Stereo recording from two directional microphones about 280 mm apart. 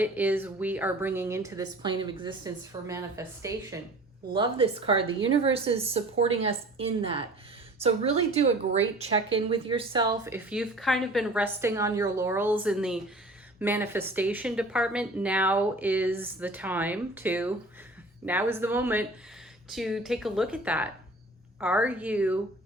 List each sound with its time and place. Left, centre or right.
0.0 s a woman's voice: centre